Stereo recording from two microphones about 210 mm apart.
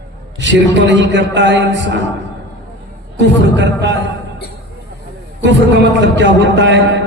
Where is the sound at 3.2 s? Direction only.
60° right (ahead or behind).